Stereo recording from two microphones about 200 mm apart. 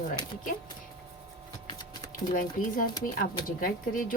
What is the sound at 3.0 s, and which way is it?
Speech, 45° left (ahead or behind).